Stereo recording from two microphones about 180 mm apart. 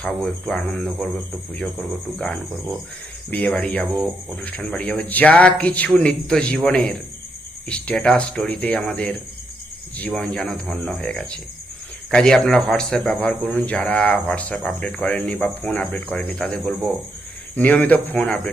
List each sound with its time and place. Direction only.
0.0 s a man's voice: 5° left (ahead or behind)
10.2 s a man's voice: centre (ahead or behind)